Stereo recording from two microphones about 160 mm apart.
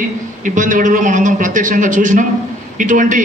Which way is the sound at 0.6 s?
55° right (ahead or behind).